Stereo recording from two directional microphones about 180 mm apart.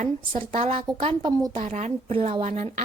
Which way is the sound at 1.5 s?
40° right (ahead or behind).